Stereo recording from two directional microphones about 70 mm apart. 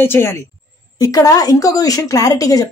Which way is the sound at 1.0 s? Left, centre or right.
Left.